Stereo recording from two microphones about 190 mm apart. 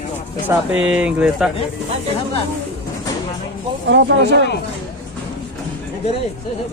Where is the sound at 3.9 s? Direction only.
65° right (ahead or behind).